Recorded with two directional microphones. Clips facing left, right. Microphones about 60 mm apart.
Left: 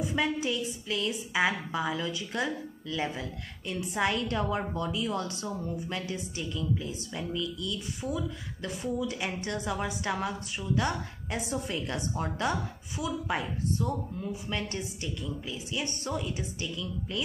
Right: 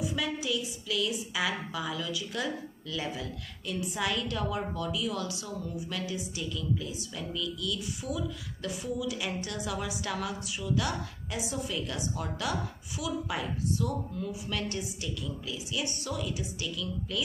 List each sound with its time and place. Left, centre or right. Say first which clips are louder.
0.0 s a woman's voice: left 3 dB; left
7.2 s a woman's voice: left 2 dB; left